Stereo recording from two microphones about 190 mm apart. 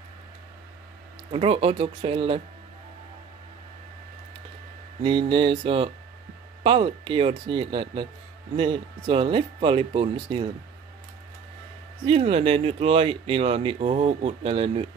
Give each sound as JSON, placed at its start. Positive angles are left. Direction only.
{"t": 1.3, "sound": "speech", "side_deg": -30}
{"t": 5.0, "sound": "speech", "side_deg": -25}
{"t": 12.1, "sound": "speech", "side_deg": -30}